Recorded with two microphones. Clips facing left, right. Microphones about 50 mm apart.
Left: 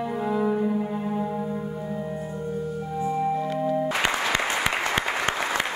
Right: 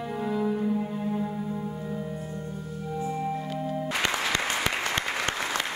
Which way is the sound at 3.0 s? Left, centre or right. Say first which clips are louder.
Left 6 dB; centre.